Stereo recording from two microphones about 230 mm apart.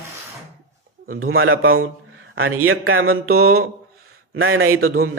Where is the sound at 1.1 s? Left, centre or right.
Right.